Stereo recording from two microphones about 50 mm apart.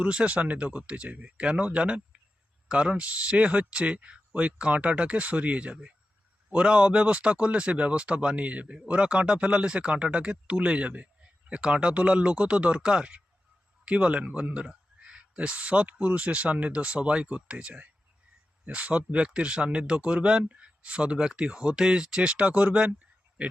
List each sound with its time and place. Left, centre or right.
0.0 s speech: right